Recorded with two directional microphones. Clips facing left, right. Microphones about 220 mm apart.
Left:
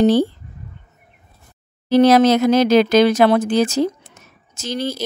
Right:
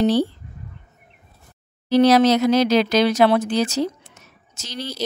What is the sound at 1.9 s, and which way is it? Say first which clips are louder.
Speech: left 2 dB; 50° left (ahead or behind).